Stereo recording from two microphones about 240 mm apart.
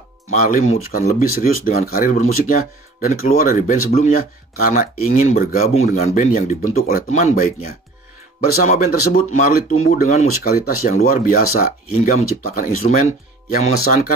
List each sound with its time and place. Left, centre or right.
0.3 s speech: left
8.6 s speech: left
10.5 s speech: left